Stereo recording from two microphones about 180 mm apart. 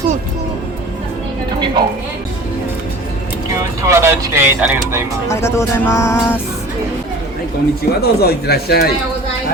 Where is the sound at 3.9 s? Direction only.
15° right (ahead or behind).